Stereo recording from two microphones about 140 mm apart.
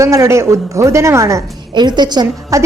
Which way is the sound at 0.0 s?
20° right (ahead or behind).